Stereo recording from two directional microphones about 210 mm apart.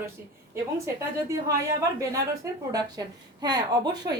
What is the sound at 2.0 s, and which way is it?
A woman's voice, 15° right (ahead or behind).